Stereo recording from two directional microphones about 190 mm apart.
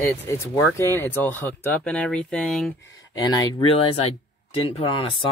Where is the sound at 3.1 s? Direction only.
20° left (ahead or behind).